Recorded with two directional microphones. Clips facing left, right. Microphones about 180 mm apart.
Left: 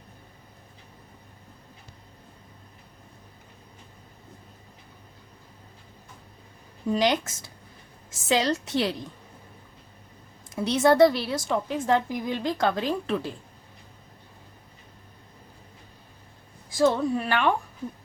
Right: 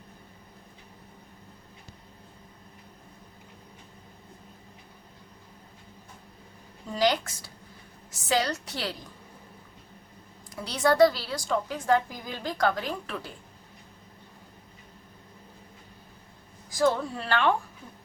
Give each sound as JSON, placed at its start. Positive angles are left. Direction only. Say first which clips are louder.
{"t": 6.9, "sound": "a woman's voice", "louder": "left 1 dB", "side_deg": 20}
{"t": 10.5, "sound": "a woman's voice", "louder": "left 5 dB", "side_deg": 25}
{"t": 16.7, "sound": "a woman's voice", "louder": "left 3 dB", "side_deg": 20}